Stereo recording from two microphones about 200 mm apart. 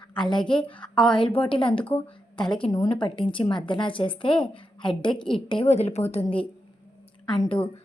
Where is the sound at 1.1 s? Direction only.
25° left (ahead or behind).